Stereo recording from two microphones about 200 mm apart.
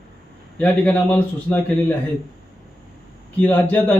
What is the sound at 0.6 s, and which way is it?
Speech, 5° left (ahead or behind).